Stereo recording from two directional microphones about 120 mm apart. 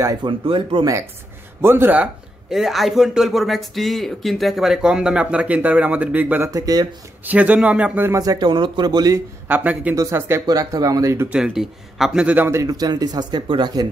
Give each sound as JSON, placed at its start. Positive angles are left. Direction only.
{"t": 0.0, "sound": "speech", "side_deg": -30}
{"t": 0.3, "sound": "speech", "side_deg": -45}
{"t": 1.6, "sound": "speech", "side_deg": -20}
{"t": 2.5, "sound": "speech", "side_deg": 0}
{"t": 6.5, "sound": "speech", "side_deg": -30}
{"t": 7.2, "sound": "speech", "side_deg": -10}
{"t": 8.2, "sound": "speech", "side_deg": -35}
{"t": 9.5, "sound": "speech", "side_deg": -15}
{"t": 11.2, "sound": "speech", "side_deg": -10}
{"t": 12.4, "sound": "speech", "side_deg": -25}